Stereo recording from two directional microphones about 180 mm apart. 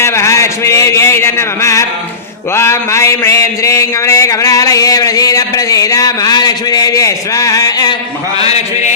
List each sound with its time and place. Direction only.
0.0 s a sound: 15° left (ahead or behind)
2.6 s a man's voice: 15° left (ahead or behind)
8.4 s a man's voice: 35° left (ahead or behind)